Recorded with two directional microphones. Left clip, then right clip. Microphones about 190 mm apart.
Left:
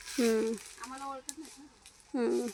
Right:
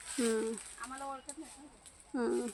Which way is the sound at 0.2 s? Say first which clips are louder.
Left 4 dB; 35° left (ahead or behind).